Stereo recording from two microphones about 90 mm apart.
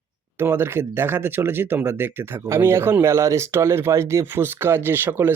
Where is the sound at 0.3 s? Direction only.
25° right (ahead or behind).